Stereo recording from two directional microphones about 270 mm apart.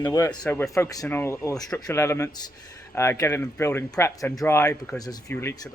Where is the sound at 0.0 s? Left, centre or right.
Centre.